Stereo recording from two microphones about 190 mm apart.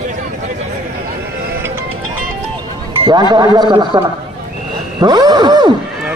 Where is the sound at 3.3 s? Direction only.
20° right (ahead or behind).